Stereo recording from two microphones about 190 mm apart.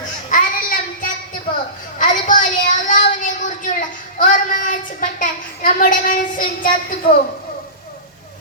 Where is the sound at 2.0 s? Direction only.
45° left (ahead or behind).